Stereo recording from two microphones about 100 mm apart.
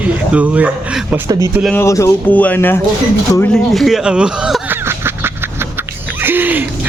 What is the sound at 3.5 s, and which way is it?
Speech, centre (ahead or behind).